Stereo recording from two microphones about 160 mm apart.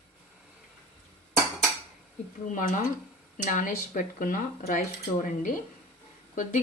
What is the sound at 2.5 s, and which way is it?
Speech, 55° left (ahead or behind).